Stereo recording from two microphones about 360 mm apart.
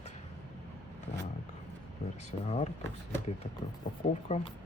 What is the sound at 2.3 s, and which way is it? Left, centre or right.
Speech, centre.